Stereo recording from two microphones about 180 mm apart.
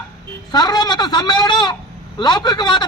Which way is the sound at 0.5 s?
20° left (ahead or behind).